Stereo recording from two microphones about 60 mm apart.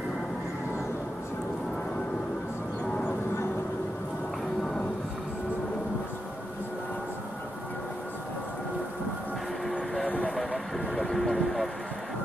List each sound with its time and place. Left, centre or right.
3.0 s a sound: left
10.0 s vehicle: left
10.3 s vehicle: centre